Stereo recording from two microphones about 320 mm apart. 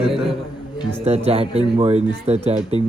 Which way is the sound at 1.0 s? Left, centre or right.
Centre.